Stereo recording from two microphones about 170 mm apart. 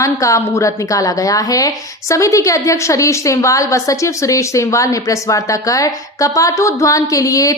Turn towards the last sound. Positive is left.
turn(degrees=20)  # may be behind; listen again after turning